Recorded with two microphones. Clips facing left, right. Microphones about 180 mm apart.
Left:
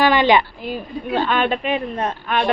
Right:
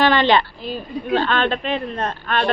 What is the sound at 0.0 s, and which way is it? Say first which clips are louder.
Speech: left 1 dB; 10° left (ahead or behind).